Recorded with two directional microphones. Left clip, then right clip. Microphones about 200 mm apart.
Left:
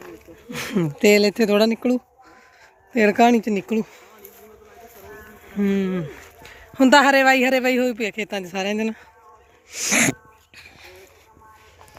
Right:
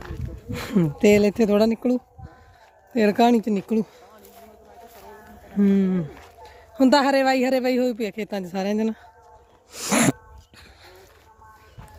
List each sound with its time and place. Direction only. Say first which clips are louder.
0.5 s speech: even; 20° right (ahead or behind)
5.5 s speech: right 1 dB; 20° right (ahead or behind)
9.7 s speech: left 2 dB; 35° right (ahead or behind)
10.6 s a sound: left 5 dB; 30° right (ahead or behind)